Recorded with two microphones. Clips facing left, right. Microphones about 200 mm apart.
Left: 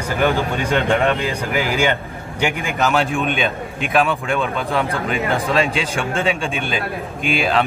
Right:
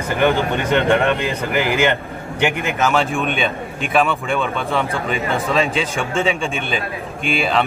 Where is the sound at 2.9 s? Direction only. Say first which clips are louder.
Left 1 dB; centre (ahead or behind).